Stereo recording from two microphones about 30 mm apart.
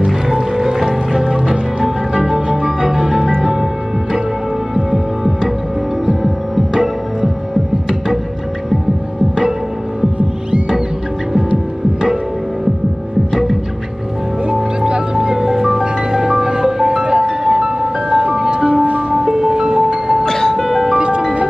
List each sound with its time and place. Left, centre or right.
0.0 s music: centre
6.7 s music: right
13.3 s hum: centre
14.5 s music: right
15.1 s music: centre
20.2 s music: centre
20.6 s music: centre
21.0 s music: right